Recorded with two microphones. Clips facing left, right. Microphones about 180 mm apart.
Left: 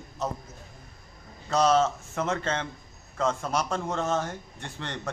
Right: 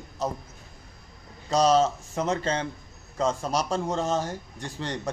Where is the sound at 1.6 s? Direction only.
35° right (ahead or behind).